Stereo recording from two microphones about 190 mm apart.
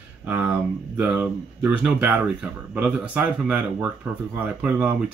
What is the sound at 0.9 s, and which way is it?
Speech, 5° right (ahead or behind).